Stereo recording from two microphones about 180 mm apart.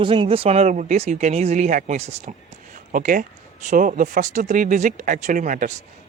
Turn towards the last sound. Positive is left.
turn(degrees=-45)  # may be behind; listen again after turning